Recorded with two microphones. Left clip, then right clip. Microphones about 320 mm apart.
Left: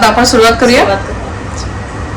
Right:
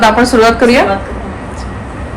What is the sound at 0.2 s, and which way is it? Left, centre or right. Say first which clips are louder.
Speech: left 1 dB; centre.